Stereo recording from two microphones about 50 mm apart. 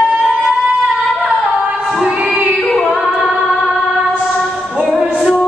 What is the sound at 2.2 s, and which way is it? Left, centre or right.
Music, right.